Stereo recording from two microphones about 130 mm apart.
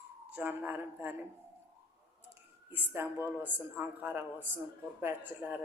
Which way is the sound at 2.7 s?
15° right (ahead or behind).